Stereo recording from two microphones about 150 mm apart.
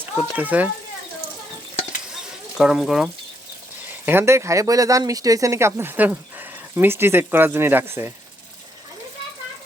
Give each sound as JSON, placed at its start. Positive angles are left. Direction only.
{"t": 0.0, "sound": "speech", "side_deg": -10}
{"t": 2.6, "sound": "speech", "side_deg": -5}
{"t": 4.0, "sound": "speech", "side_deg": -15}